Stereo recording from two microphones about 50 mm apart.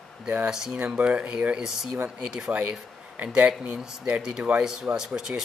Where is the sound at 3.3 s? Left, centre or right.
Right.